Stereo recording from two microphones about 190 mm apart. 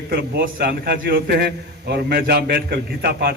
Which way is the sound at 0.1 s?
55° right (ahead or behind).